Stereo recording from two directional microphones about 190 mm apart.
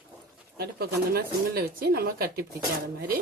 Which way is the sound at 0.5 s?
55° right (ahead or behind).